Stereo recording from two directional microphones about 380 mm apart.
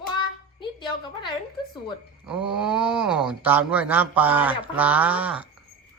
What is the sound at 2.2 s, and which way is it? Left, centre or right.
Speech, centre.